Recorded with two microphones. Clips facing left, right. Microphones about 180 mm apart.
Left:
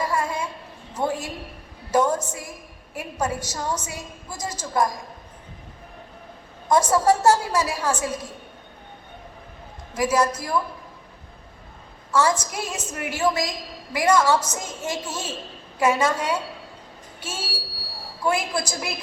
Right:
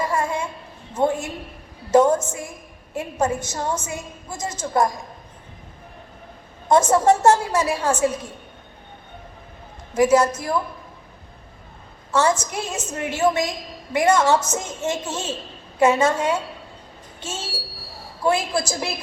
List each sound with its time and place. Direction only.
0.1 s a sound: 25° right (ahead or behind)
0.9 s a woman's voice: 25° right (ahead or behind)
6.7 s a woman's voice: 25° right (ahead or behind)
9.9 s a woman's voice: 25° right (ahead or behind)
12.1 s a woman's voice: 25° right (ahead or behind)